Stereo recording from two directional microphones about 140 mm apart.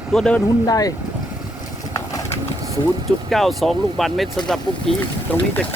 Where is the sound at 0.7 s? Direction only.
25° left (ahead or behind).